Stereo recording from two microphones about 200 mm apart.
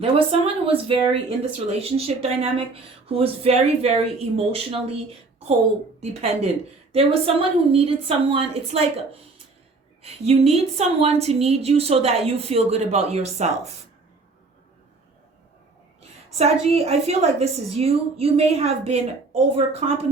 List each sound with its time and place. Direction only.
0.0 s a woman's voice: 30° right (ahead or behind)
6.0 s a woman's voice: 35° right (ahead or behind)
16.4 s a woman's voice: 30° right (ahead or behind)